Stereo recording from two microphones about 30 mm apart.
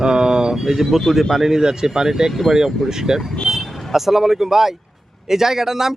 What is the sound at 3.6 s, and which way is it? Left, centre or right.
Vehicle, centre.